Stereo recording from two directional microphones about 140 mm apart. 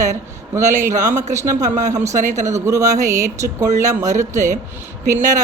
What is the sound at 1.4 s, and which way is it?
Speech, 60° right (ahead or behind).